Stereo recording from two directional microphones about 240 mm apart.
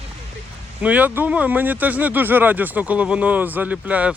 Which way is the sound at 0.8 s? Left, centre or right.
Centre.